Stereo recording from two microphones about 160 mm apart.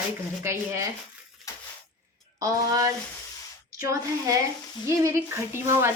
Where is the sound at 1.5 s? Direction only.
20° left (ahead or behind).